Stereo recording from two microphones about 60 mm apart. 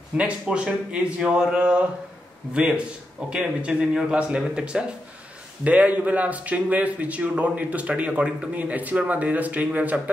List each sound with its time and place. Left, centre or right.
0.2 s a man's voice: centre